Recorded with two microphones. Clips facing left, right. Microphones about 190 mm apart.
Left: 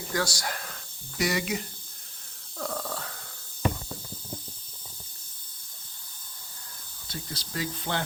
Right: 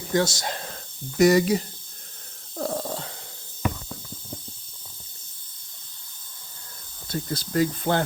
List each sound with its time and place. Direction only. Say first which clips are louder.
0.1 s speech: right 7 dB; 25° right (ahead or behind)
1.2 s speech: right 11 dB; 40° right (ahead or behind)
2.6 s a sound: right 5 dB; 35° right (ahead or behind)
7.1 s speech: right 10 dB; 50° right (ahead or behind)